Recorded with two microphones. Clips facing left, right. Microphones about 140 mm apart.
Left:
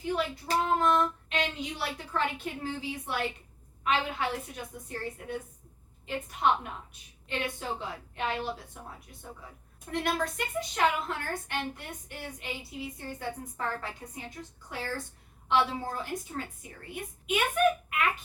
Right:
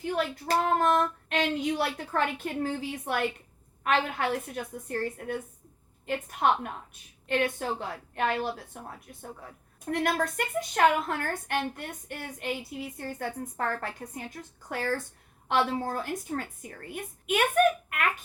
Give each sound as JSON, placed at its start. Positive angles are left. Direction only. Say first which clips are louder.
{"t": 0.0, "sound": "a woman's voice", "louder": "right 2 dB", "side_deg": -55}